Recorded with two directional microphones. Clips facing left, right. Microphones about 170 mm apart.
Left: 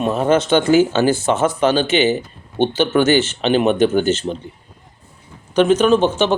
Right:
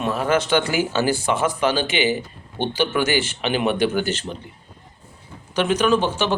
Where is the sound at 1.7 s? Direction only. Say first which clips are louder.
Left 5 dB; 15° right (ahead or behind).